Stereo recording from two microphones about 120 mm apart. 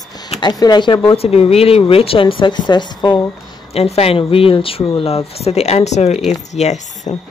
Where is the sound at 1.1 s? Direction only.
55° left (ahead or behind); by 3.2 s 40° left (ahead or behind).